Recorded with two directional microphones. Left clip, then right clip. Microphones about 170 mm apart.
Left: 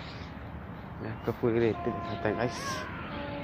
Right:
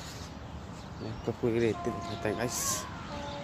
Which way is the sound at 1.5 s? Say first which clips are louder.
Left 2 dB; 25° right (ahead or behind).